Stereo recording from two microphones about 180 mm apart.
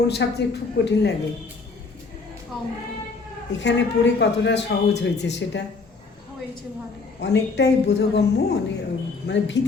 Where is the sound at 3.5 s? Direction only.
80° left.